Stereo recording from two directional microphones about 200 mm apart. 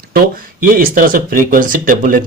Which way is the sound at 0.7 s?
45° right (ahead or behind).